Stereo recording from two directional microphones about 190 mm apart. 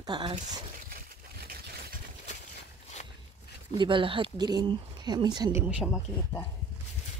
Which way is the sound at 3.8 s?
25° right (ahead or behind).